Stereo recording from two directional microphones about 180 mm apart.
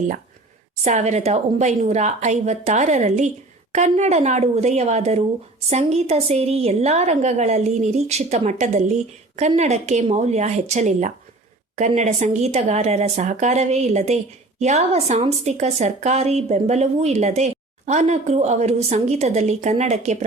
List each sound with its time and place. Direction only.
0.9 s a woman's voice: 40° right (ahead or behind)